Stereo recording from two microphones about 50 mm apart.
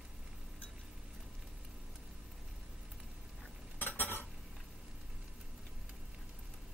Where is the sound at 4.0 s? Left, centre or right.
Left.